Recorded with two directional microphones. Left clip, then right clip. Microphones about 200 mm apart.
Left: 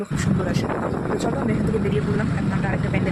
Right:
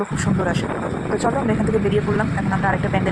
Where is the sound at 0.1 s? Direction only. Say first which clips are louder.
Right 3 dB; centre (ahead or behind).